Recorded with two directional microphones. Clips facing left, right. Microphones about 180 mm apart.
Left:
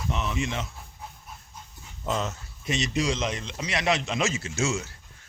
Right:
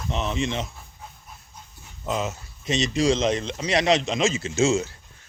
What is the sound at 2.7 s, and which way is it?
Speech, 25° right (ahead or behind).